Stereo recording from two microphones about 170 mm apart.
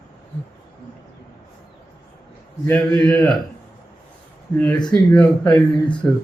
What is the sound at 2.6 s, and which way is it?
Speech, 10° left (ahead or behind).